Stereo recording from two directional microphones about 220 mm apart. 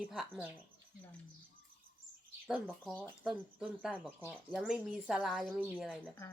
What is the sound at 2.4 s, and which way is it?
A woman's voice, centre (ahead or behind).